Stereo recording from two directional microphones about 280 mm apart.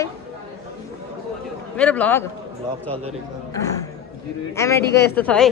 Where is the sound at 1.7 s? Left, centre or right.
Centre.